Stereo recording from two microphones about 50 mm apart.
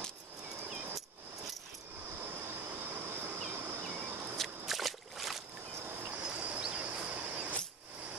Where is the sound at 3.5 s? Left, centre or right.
Right.